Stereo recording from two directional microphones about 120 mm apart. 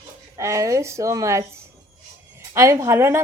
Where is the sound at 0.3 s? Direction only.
25° right (ahead or behind).